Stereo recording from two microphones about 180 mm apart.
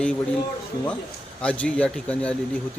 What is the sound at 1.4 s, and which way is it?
Speech, 5° left (ahead or behind).